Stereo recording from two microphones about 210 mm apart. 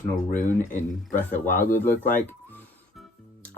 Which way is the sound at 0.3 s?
35° left (ahead or behind).